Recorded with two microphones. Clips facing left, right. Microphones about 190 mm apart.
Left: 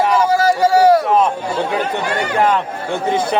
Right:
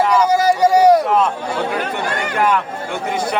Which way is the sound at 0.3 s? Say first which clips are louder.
Even; 15° right (ahead or behind).